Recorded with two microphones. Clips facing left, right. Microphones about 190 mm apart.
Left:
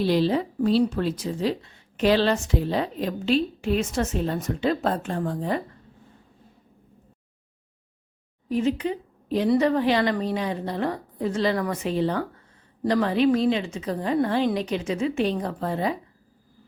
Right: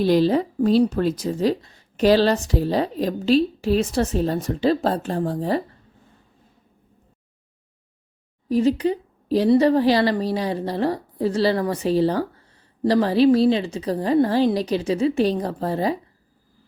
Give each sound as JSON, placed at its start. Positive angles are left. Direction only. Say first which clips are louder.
{"t": 0.0, "sound": "speech", "louder": "right 4 dB", "side_deg": -45}
{"t": 8.4, "sound": "speech", "louder": "right 5 dB", "side_deg": -35}